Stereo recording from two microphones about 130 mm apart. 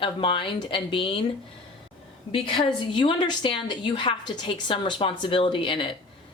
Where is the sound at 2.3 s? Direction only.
40° left (ahead or behind).